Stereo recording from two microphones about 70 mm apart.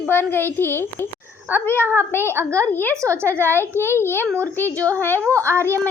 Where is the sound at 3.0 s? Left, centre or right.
Right.